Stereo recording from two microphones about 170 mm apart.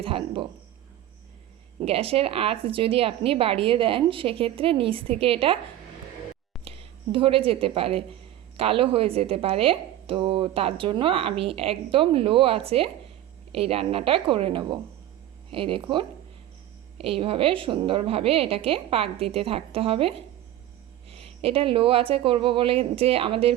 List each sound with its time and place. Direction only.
0.0 s a woman's voice: 30° right (ahead or behind)
1.8 s a woman's voice: 35° right (ahead or behind)
6.7 s a woman's voice: 35° right (ahead or behind)